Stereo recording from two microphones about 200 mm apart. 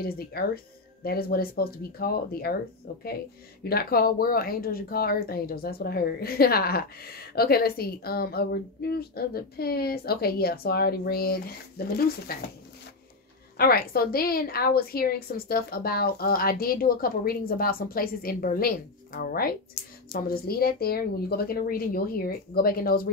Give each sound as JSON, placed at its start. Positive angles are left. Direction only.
{"t": 0.0, "sound": "a woman's voice", "side_deg": 50}
{"t": 3.6, "sound": "a woman's voice", "side_deg": 50}
{"t": 13.6, "sound": "a woman's voice", "side_deg": 50}